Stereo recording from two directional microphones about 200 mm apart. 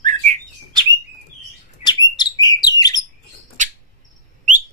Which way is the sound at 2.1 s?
20° left (ahead or behind).